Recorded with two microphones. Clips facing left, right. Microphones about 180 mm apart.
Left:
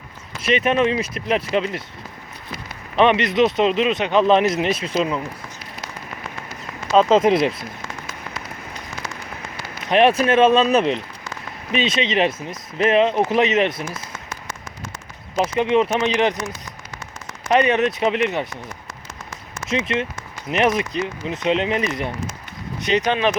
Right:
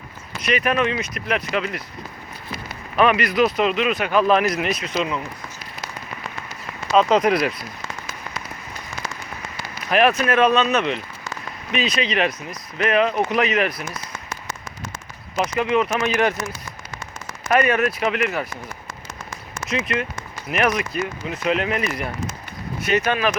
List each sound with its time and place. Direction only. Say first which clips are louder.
0.4 s speech: left 3 dB; 25° left (ahead or behind)
2.9 s speech: left 2 dB; 25° left (ahead or behind)
6.9 s speech: left 2 dB; 25° left (ahead or behind)
9.9 s speech: left 3 dB; 30° left (ahead or behind)
15.4 s speech: left 2 dB; 30° left (ahead or behind)
17.5 s speech: left 2 dB; 20° left (ahead or behind)
19.6 s speech: left 2 dB; 25° left (ahead or behind)